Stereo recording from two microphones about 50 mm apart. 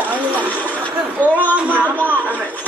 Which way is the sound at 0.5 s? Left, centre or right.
Left.